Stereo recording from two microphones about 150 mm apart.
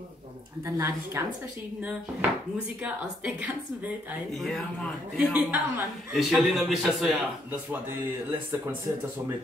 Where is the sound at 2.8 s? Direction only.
10° right (ahead or behind).